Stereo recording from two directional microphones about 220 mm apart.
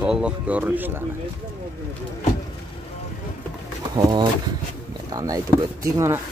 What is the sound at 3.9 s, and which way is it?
Speech, 20° right (ahead or behind).